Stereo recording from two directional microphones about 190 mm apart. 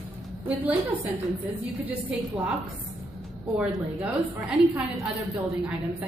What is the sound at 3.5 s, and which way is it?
A woman's voice, centre (ahead or behind).